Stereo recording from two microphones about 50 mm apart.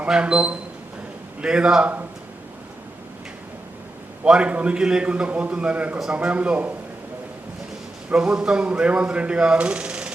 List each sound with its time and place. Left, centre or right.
0.1 s a man's voice: centre
4.2 s speech: right
8.1 s speech: right